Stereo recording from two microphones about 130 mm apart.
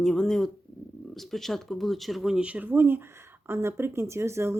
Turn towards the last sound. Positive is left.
turn(degrees=-20)  # may be behind; listen again after turning